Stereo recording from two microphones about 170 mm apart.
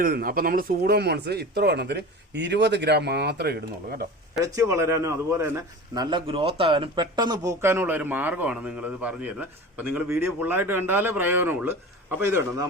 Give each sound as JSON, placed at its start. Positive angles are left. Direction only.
{"t": 0.0, "sound": "speech", "side_deg": -60}
{"t": 4.5, "sound": "a man's voice", "side_deg": -15}